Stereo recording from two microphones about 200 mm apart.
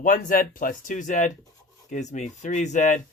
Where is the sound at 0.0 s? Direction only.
40° left (ahead or behind).